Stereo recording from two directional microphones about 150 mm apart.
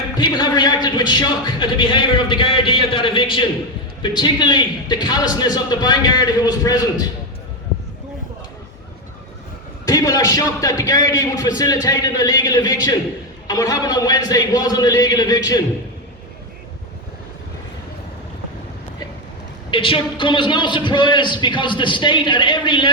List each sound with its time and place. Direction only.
0.2 s a man's voice: 30° left (ahead or behind)
9.8 s a man's voice: 25° left (ahead or behind)
19.7 s a man's voice: 35° left (ahead or behind)